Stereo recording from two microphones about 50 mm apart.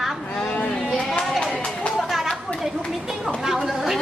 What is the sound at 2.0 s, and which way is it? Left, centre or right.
Chatter, centre.